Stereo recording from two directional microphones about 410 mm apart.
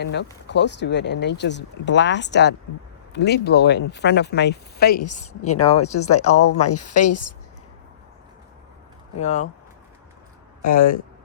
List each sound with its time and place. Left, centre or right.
0.0 s speech: left
6.1 s a woman's voice: left
9.2 s speech: centre
10.6 s speech: centre